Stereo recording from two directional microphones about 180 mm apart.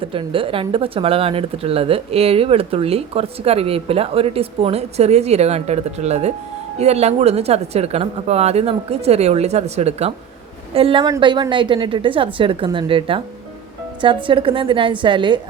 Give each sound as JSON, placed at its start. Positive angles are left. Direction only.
{"t": 0.0, "sound": "a woman's voice", "side_deg": -30}